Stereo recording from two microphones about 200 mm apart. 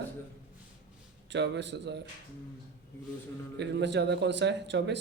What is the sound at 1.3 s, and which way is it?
Speech, 60° right (ahead or behind).